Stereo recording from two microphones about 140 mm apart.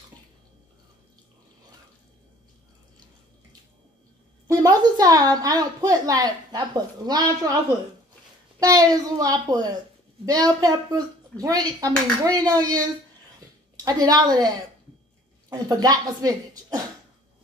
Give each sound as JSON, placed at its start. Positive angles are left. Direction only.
{"t": 4.5, "sound": "a woman's voice", "side_deg": -25}
{"t": 8.5, "sound": "speech", "side_deg": -25}
{"t": 13.8, "sound": "speech", "side_deg": -30}
{"t": 15.5, "sound": "speech", "side_deg": -25}